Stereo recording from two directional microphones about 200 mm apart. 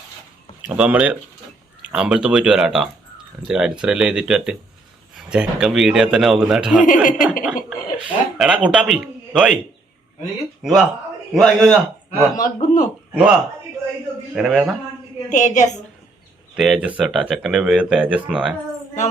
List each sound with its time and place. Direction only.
0.6 s a man's voice: 5° right (ahead or behind)
6.8 s a man's voice: 40° left (ahead or behind)
7.4 s speech: 5° right (ahead or behind)
10.6 s a man's voice: centre (ahead or behind)
12.4 s a man's voice: 40° left (ahead or behind)
13.1 s a man's voice: 5° right (ahead or behind)
15.3 s a man's voice: 35° left (ahead or behind)
16.6 s a man's voice: 5° right (ahead or behind)